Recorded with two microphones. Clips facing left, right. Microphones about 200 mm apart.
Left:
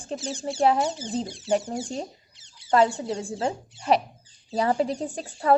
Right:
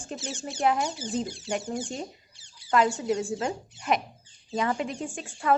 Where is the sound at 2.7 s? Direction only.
30° left (ahead or behind).